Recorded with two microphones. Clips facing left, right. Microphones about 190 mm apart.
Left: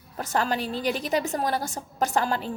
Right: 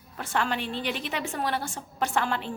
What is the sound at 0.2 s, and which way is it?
A woman's voice, 40° left (ahead or behind).